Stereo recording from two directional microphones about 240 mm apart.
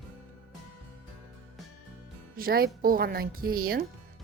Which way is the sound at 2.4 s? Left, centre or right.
Right.